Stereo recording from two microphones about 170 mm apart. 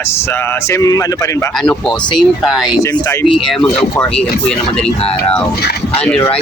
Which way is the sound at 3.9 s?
5° left (ahead or behind).